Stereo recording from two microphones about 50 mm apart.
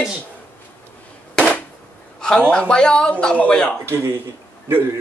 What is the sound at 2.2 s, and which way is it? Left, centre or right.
Speech, centre.